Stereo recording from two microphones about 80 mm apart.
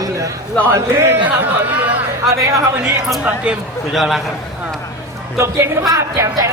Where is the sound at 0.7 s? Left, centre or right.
Right.